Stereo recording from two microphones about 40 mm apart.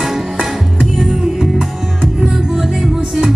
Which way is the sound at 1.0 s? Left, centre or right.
Centre.